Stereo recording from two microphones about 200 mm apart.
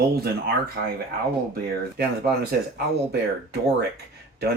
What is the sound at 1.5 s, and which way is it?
Speech, 55° right (ahead or behind).